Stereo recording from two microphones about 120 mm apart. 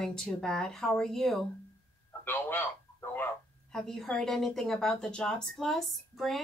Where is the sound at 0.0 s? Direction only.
5° left (ahead or behind).